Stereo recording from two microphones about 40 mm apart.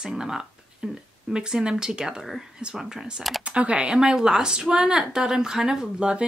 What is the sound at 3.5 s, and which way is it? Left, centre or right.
Speech, right.